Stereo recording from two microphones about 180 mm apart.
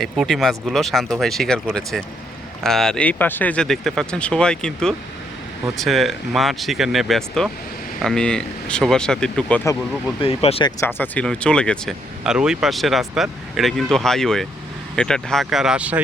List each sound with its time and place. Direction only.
0.0 s speech: centre (ahead or behind)
10.2 s speech: 30° left (ahead or behind)
10.8 s speech: 10° left (ahead or behind); by 16.0 s 5° right (ahead or behind)